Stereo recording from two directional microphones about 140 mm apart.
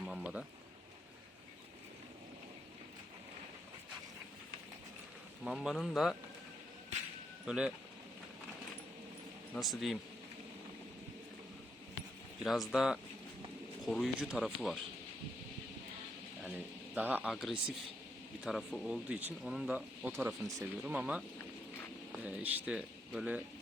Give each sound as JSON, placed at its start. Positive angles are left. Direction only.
{"t": 0.0, "sound": "a sound", "side_deg": -5}
{"t": 5.5, "sound": "speech", "side_deg": -5}
{"t": 7.4, "sound": "speech", "side_deg": -5}
{"t": 9.6, "sound": "speech", "side_deg": 0}
{"t": 12.4, "sound": "speech", "side_deg": 0}
{"t": 16.9, "sound": "speech", "side_deg": -15}